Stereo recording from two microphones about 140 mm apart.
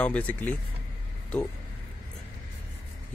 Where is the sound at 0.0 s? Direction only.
10° left (ahead or behind).